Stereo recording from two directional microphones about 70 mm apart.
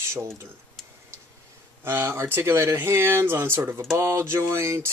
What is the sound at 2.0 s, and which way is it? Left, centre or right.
Speech, right.